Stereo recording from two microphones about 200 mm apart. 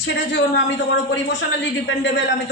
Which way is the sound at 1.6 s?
65° left (ahead or behind).